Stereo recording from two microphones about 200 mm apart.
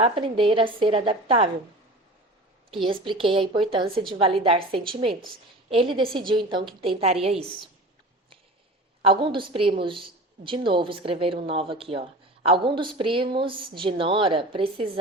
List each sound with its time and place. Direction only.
0.0 s a woman's voice: 25° right (ahead or behind)
2.8 s a woman's voice: 25° right (ahead or behind)
9.0 s a woman's voice: 25° right (ahead or behind)